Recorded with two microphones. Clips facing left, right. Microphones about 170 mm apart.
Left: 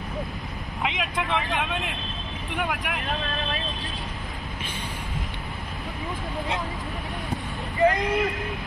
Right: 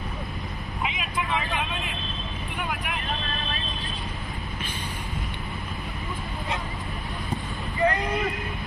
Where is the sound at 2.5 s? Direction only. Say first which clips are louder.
Left 4 dB; 75° left (ahead or behind).